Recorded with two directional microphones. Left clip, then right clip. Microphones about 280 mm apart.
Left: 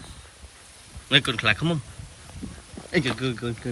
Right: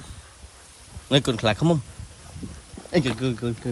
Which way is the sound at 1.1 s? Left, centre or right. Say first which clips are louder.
Left 1 dB; centre.